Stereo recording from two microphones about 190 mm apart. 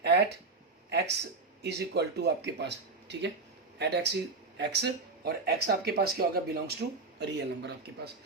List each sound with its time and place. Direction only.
0.0 s a sound: 60° right (ahead or behind)
0.9 s speech: 60° right (ahead or behind); by 7.0 s 45° right (ahead or behind)
7.2 s speech: 60° right (ahead or behind)